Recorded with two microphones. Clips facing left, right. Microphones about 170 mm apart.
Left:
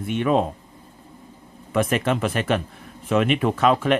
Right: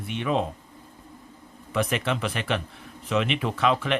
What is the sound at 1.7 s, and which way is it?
Speech, 50° left (ahead or behind).